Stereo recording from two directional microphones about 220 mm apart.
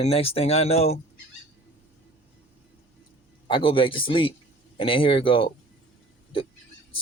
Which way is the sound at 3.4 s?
25° left (ahead or behind).